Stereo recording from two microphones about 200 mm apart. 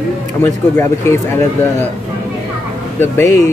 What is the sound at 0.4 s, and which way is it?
Speech, 10° left (ahead or behind).